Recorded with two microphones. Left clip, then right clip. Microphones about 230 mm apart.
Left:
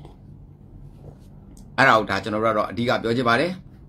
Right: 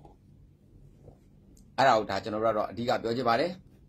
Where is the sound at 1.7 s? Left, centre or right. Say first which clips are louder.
Left 7 dB; centre.